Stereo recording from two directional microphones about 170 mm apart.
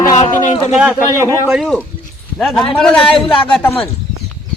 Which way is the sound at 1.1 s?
15° right (ahead or behind).